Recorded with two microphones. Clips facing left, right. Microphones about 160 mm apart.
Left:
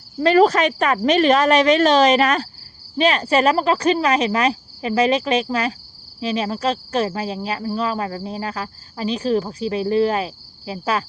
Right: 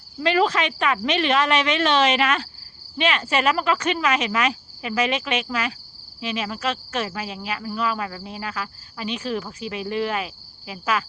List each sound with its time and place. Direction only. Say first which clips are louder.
0.2 s speech: left 6 dB; 40° left (ahead or behind)